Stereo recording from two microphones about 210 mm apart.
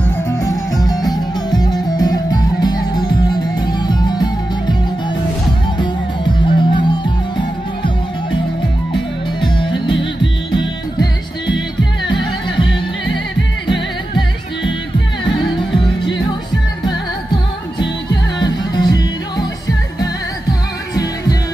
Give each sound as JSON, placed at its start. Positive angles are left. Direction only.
{"t": 0.8, "sound": "music", "side_deg": 20}
{"t": 5.8, "sound": "music", "side_deg": 20}
{"t": 9.4, "sound": "music", "side_deg": 25}
{"t": 15.2, "sound": "music", "side_deg": 25}
{"t": 18.4, "sound": "music", "side_deg": 20}
{"t": 20.9, "sound": "music", "side_deg": 15}